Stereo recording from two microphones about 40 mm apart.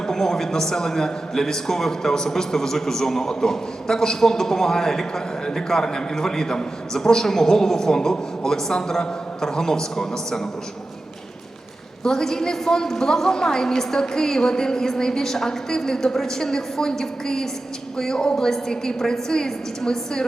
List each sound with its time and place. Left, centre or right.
0.1 s a man's voice: centre
12.0 s a man's voice: centre